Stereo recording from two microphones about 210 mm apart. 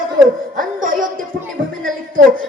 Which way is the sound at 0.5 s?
40° right (ahead or behind).